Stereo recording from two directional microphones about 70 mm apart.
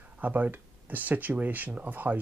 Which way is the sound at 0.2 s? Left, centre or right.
Right.